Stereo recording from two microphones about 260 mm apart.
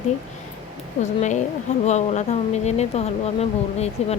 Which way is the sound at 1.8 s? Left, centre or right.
Left.